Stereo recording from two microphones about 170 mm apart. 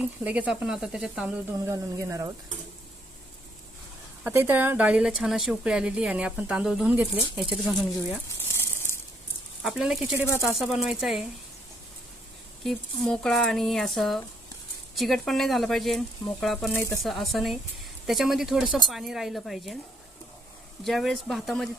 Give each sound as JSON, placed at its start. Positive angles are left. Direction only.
{"t": 0.0, "sound": "speech", "side_deg": -5}
{"t": 4.2, "sound": "speech", "side_deg": -10}
{"t": 8.4, "sound": "a sound", "side_deg": 15}
{"t": 9.6, "sound": "speech", "side_deg": -5}
{"t": 10.2, "sound": "speech", "side_deg": 15}
{"t": 10.6, "sound": "speech", "side_deg": 0}
{"t": 12.6, "sound": "speech", "side_deg": 0}
{"t": 16.7, "sound": "speech", "side_deg": 15}
{"t": 17.0, "sound": "speech", "side_deg": 0}
{"t": 20.8, "sound": "speech", "side_deg": 0}